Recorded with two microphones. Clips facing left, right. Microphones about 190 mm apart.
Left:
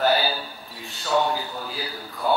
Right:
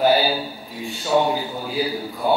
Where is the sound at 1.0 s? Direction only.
20° right (ahead or behind).